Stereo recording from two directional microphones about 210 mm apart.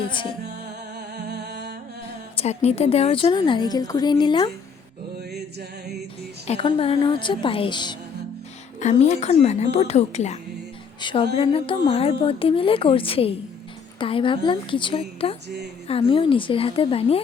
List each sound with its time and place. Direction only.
0.0 s music: 25° left (ahead or behind)
0.6 s music: 50° right (ahead or behind)
2.3 s a woman's voice: 30° left (ahead or behind)
5.3 s music: 50° right (ahead or behind)
6.5 s a woman's voice: 25° left (ahead or behind)
8.8 s a woman's voice: 35° left (ahead or behind)
15.4 s music: 50° right (ahead or behind)
15.9 s a woman's voice: 25° left (ahead or behind)